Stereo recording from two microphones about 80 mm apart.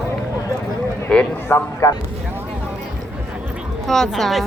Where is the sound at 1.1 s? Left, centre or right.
Centre.